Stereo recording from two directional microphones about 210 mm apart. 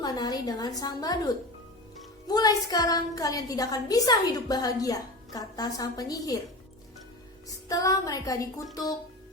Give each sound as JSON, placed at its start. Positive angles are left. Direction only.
{"t": 0.0, "sound": "a woman's voice", "side_deg": 20}
{"t": 7.4, "sound": "a woman's voice", "side_deg": 15}